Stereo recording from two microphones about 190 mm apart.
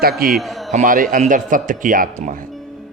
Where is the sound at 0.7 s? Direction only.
45° right (ahead or behind).